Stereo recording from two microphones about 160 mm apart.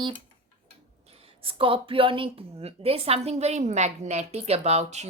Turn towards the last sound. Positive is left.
turn(degrees=-45)  # may be behind; listen again after turning